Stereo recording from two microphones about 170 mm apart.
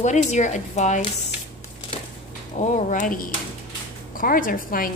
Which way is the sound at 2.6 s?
45° left (ahead or behind).